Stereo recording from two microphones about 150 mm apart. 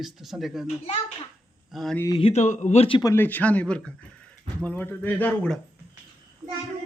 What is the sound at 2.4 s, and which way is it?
Speech, 55° left (ahead or behind).